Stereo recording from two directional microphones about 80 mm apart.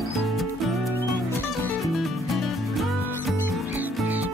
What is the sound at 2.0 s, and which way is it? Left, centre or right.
Music, centre.